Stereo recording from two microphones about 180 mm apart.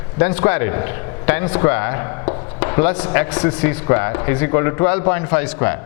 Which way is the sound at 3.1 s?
10° left (ahead or behind).